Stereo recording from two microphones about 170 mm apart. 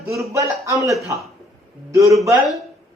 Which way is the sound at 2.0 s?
20° right (ahead or behind).